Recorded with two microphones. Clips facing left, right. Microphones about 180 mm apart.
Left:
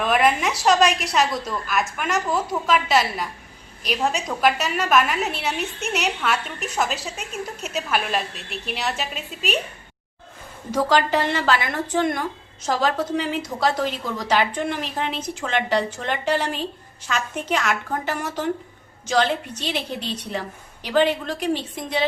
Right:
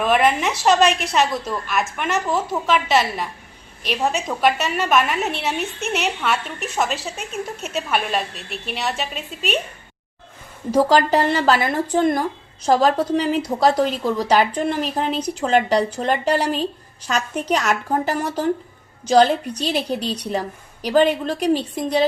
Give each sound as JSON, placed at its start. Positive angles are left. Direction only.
{"t": 0.0, "sound": "a woman's voice", "side_deg": 0}
{"t": 10.7, "sound": "a woman's voice", "side_deg": -35}